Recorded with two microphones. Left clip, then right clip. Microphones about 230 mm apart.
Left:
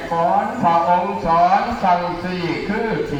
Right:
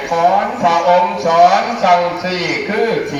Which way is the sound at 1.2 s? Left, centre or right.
Right.